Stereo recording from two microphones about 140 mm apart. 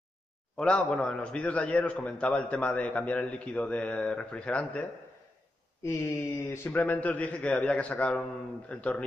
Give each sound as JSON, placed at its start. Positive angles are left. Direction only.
{"t": 0.6, "sound": "a man's voice", "side_deg": 5}
{"t": 6.5, "sound": "a man's voice", "side_deg": 15}